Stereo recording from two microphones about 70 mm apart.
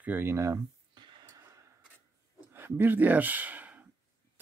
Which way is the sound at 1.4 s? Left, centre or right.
Right.